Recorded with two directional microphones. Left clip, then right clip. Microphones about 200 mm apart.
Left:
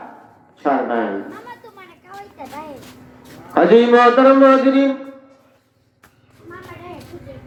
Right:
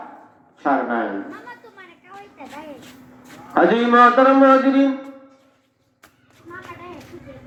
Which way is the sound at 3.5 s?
30° left (ahead or behind).